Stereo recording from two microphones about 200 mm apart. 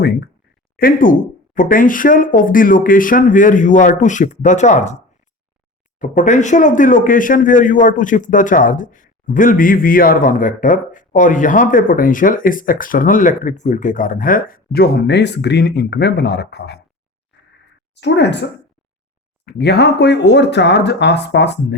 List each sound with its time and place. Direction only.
0.0 s speech: 50° left (ahead or behind)
6.0 s speech: 40° left (ahead or behind); by 16.8 s 55° left (ahead or behind)
17.9 s speech: 60° left (ahead or behind)
19.5 s speech: 55° left (ahead or behind)